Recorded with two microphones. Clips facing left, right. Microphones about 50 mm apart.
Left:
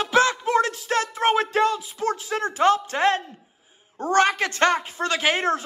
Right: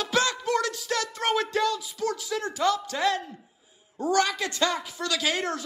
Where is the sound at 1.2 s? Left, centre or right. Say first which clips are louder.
Left 5 dB; left.